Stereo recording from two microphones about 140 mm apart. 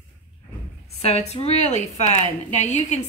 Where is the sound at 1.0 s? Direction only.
50° left (ahead or behind).